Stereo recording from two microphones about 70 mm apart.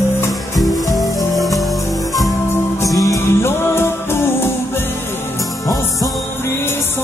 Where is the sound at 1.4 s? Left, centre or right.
Centre.